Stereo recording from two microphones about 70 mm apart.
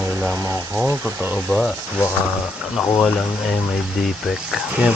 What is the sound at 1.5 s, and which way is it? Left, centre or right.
Speech, centre.